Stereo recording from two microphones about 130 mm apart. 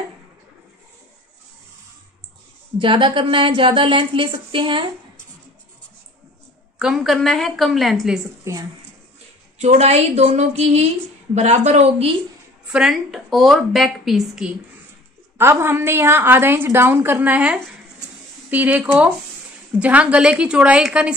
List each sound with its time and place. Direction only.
2.8 s speech: 40° right (ahead or behind)
6.8 s a woman's voice: 5° right (ahead or behind)
8.5 s speech: 20° right (ahead or behind)
9.6 s a woman's voice: 55° right (ahead or behind)
12.7 s a woman's voice: 5° right (ahead or behind)
15.3 s a woman's voice: 20° right (ahead or behind)